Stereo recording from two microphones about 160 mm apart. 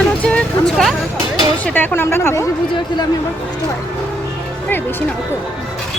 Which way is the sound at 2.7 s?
25° left (ahead or behind).